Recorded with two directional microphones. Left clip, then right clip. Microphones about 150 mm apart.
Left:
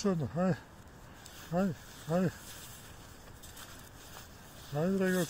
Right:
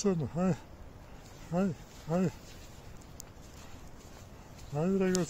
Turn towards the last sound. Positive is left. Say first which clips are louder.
# right 1 dB
turn(degrees=-20)  # may be behind; listen again after turning